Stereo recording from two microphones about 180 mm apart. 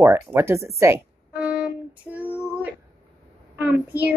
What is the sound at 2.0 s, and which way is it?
Female singing, 10° right (ahead or behind).